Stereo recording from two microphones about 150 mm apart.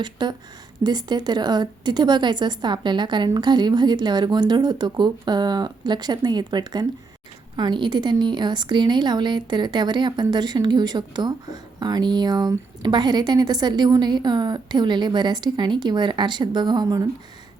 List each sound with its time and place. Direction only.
0.0 s a woman's voice: 30° right (ahead or behind)